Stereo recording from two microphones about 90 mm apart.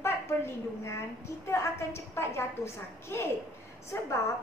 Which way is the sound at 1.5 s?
30° left (ahead or behind).